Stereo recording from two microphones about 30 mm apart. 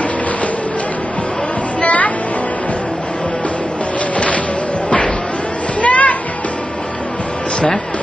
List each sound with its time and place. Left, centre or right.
1.8 s music: left
4.8 s a sound: left
5.8 s music: left